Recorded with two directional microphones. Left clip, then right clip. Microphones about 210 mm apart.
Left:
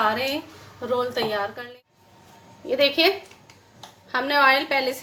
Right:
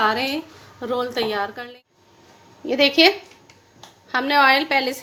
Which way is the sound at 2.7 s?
30° right (ahead or behind).